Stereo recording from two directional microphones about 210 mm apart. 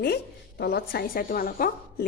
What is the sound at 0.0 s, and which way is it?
Speech, 45° left (ahead or behind).